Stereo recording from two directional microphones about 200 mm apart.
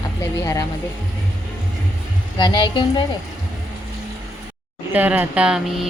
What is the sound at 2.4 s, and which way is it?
Speech, 20° left (ahead or behind).